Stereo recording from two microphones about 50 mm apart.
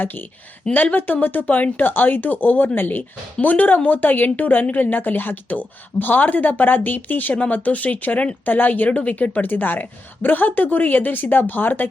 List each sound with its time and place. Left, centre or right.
0.0 s speech: left